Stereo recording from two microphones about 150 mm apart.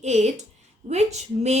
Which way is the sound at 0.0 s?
50° right (ahead or behind).